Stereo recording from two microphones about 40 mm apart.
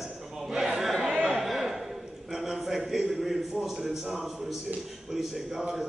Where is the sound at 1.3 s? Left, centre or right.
Centre.